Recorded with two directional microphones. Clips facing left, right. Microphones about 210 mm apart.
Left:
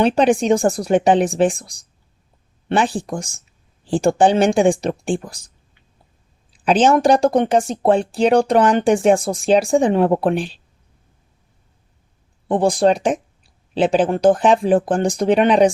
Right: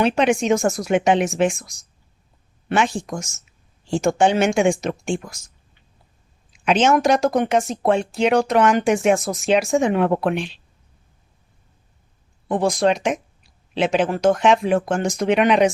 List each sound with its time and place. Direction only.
0.0 s speech: 35° left (ahead or behind)
6.5 s speech: 35° left (ahead or behind)
12.5 s speech: 30° left (ahead or behind)